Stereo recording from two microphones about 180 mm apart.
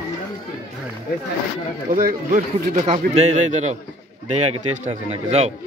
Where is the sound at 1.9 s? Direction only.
45° right (ahead or behind).